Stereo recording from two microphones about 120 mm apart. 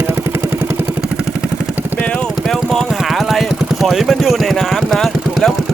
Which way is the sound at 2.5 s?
Centre (ahead or behind).